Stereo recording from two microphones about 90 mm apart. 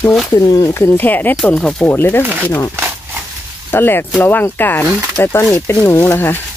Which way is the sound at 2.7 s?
25° right (ahead or behind).